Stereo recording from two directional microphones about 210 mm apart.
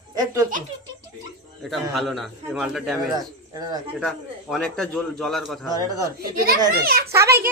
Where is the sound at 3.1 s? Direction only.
20° right (ahead or behind).